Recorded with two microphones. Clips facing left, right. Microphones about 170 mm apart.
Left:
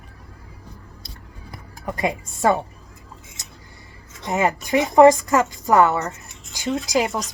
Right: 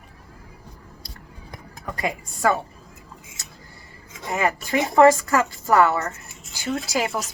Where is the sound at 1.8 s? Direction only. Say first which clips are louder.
Left 4 dB; 20° left (ahead or behind).